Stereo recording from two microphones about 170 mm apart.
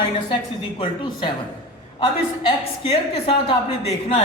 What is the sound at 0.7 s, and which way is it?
A woman's voice, 30° left (ahead or behind).